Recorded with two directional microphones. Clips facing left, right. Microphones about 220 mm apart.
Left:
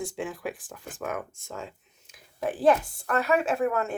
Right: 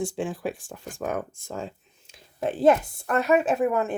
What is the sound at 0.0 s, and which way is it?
A woman's voice, 30° right (ahead or behind).